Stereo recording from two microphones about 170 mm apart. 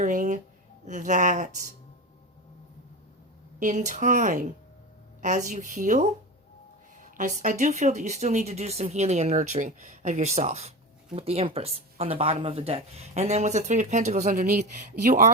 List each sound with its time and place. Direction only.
0.0 s speech: 50° right (ahead or behind)
3.6 s speech: 45° right (ahead or behind)
7.0 s a sound: 50° right (ahead or behind)
7.6 s speech: 40° right (ahead or behind)
14.3 s speech: 60° right (ahead or behind)